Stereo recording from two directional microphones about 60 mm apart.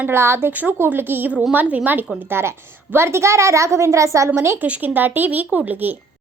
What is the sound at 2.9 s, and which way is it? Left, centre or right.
A woman's voice, right.